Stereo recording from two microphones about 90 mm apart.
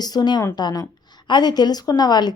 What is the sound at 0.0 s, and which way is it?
A woman's voice, 50° left (ahead or behind).